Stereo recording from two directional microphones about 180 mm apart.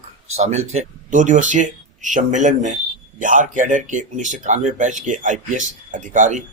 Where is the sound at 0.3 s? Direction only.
40° right (ahead or behind).